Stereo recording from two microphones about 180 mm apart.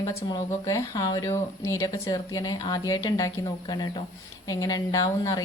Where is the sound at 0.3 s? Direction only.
20° left (ahead or behind).